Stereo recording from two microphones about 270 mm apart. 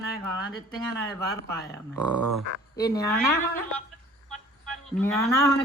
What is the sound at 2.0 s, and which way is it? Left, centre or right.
Speech, right.